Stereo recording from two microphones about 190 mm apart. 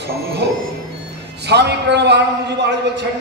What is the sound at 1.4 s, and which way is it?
A man's voice, 60° right (ahead or behind).